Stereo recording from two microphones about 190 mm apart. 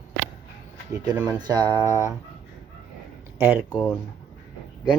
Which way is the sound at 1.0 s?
15° right (ahead or behind).